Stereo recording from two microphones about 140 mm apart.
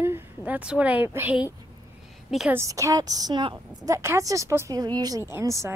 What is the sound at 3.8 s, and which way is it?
Speech, 20° right (ahead or behind).